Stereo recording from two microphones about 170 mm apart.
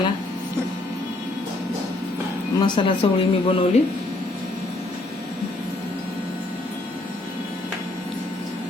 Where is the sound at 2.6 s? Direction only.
30° left (ahead or behind).